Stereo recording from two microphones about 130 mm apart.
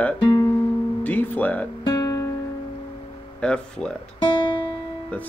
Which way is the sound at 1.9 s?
35° left (ahead or behind).